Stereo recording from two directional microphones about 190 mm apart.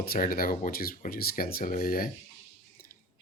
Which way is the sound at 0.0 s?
50° left (ahead or behind).